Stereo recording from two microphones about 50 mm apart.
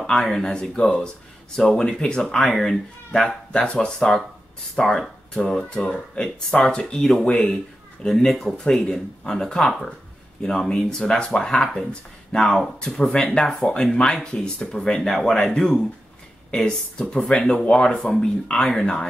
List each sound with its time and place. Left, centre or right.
0.0 s speech: centre
15.0 s speech: centre